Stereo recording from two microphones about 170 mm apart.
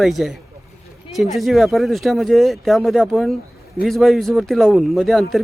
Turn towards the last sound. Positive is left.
turn(degrees=0)  # may be behind; listen again after turning